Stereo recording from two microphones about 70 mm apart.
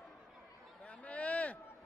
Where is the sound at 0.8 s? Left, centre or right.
Centre.